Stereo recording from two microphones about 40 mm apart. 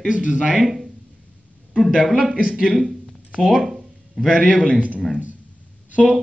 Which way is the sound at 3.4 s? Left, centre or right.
Centre.